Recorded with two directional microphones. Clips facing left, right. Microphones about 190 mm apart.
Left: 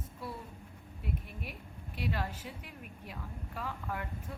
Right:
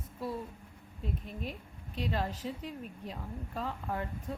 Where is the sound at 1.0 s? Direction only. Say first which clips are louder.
Right 3 dB; 10° left (ahead or behind).